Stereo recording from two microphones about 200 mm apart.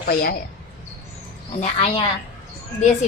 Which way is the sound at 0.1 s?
50° left (ahead or behind).